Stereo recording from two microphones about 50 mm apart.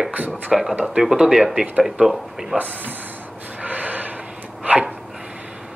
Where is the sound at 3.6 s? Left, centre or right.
Right.